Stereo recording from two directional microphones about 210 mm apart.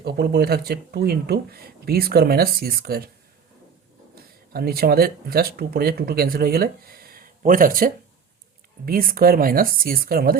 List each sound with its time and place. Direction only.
0.0 s speech: 50° right (ahead or behind)
4.1 s speech: 50° right (ahead or behind)